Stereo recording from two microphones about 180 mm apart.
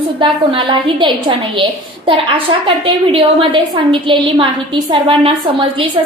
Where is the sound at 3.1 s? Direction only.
25° right (ahead or behind).